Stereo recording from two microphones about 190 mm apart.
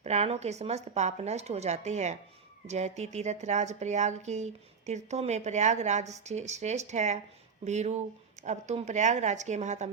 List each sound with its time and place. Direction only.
0.0 s speech: 35° right (ahead or behind)